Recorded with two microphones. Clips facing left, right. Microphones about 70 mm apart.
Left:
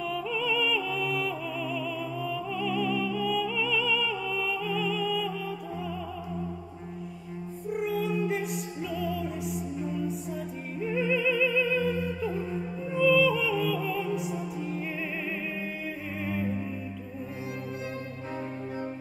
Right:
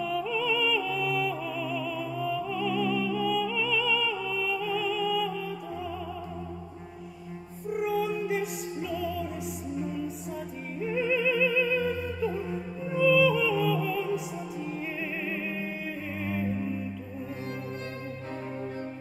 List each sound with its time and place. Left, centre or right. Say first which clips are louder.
0.0 s music: right 2 dB; centre
7.7 s music: right 1 dB; centre
10.8 s opera: even; centre
11.3 s music: even; right
11.8 s music: even; centre
16.2 s music: even; centre